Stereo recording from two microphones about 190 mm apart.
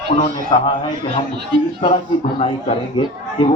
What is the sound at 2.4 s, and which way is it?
A man's voice, 30° left (ahead or behind).